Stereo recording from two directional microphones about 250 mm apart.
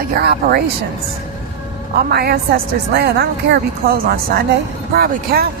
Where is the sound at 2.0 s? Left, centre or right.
Right.